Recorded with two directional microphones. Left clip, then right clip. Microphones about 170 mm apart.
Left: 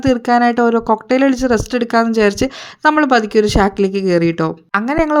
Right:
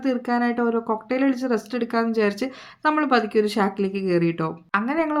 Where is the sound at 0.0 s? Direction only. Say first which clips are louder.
Left 10 dB; 50° left (ahead or behind).